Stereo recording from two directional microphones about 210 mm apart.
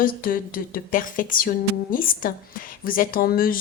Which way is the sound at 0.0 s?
45° left (ahead or behind).